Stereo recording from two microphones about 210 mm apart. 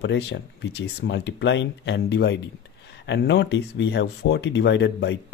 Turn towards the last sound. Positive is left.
turn(degrees=55)  # may be behind; listen again after turning